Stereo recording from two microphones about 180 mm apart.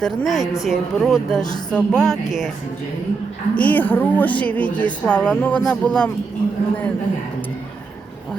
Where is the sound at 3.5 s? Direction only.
10° left (ahead or behind).